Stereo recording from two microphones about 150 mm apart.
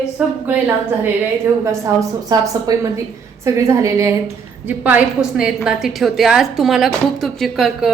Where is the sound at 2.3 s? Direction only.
25° right (ahead or behind).